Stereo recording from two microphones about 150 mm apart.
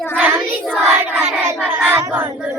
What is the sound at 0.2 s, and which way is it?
Child singing, 10° right (ahead or behind).